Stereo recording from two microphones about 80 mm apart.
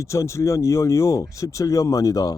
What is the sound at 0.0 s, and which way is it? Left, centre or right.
Speech, left.